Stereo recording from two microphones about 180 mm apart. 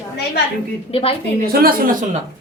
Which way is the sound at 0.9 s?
30° left (ahead or behind).